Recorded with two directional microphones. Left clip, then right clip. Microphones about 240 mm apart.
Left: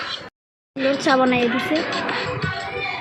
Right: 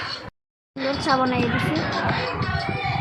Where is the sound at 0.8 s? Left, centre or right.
Centre.